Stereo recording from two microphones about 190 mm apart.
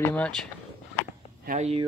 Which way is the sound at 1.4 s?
45° right (ahead or behind).